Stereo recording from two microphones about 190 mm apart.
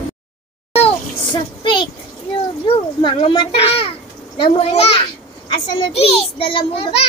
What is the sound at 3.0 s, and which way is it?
A child's voice, 25° left (ahead or behind).